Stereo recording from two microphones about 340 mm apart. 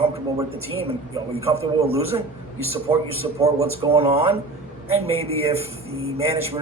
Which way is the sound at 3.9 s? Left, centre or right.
Centre.